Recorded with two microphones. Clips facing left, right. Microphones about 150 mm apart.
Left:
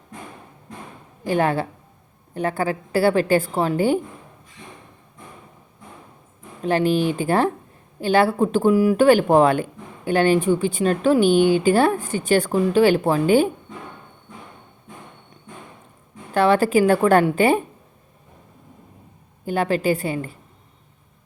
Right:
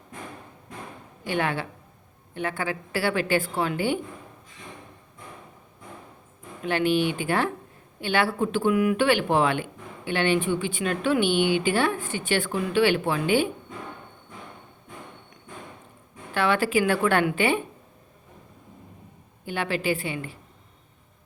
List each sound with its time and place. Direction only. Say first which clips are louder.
1.2 s speech: left 7 dB; 40° left (ahead or behind)
6.6 s speech: left 4 dB; 35° left (ahead or behind)
16.3 s speech: left 6 dB; 40° left (ahead or behind)
19.5 s speech: left 6 dB; 40° left (ahead or behind)